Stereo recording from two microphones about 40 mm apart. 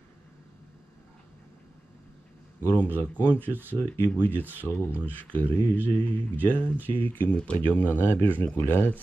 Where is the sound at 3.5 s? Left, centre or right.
Right.